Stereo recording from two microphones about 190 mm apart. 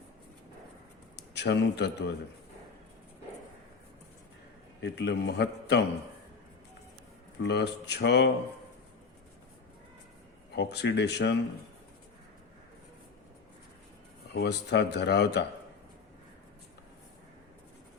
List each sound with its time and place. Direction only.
1.1 s speech: 65° left (ahead or behind)
4.8 s speech: 65° left (ahead or behind)
7.3 s speech: 65° left (ahead or behind)
10.5 s speech: 65° left (ahead or behind)
14.3 s speech: 65° left (ahead or behind)